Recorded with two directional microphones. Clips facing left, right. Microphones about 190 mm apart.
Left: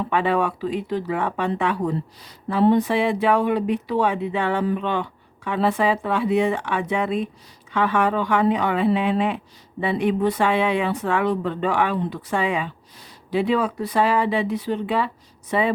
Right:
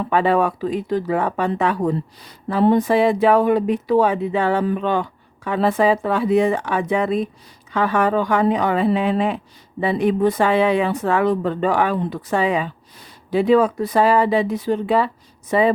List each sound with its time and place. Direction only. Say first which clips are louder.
0.1 s speech: right 5 dB; 40° right (ahead or behind)
13.0 s speech: right 3 dB; 50° right (ahead or behind)